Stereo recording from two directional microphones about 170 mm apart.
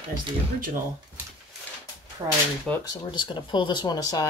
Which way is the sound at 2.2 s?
20° right (ahead or behind).